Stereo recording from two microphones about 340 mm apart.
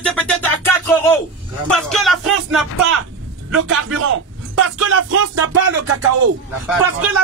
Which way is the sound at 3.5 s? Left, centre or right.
Right.